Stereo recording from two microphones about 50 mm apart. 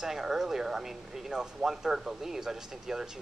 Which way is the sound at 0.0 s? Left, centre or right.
Centre.